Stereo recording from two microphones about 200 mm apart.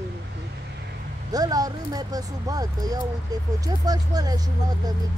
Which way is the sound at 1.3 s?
20° right (ahead or behind).